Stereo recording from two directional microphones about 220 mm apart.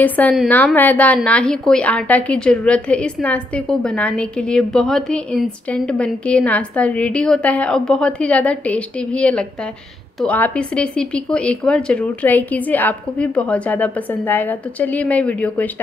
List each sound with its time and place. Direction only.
0.0 s a woman's voice: 10° left (ahead or behind)